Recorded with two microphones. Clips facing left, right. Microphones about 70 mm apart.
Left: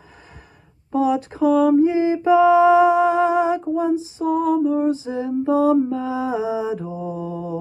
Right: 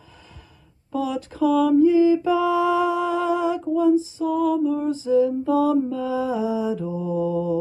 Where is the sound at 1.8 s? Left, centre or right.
Left.